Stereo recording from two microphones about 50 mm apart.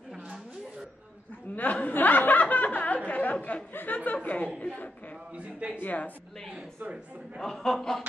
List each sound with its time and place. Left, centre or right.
0.1 s a sound: centre
1.5 s chuckle: left
3.1 s a sound: left
4.6 s a man's voice: left
5.3 s speech: right
5.8 s a man's voice: left
7.3 s speech: centre